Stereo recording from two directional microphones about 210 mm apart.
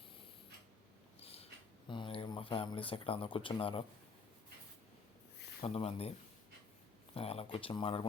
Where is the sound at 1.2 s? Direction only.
30° left (ahead or behind).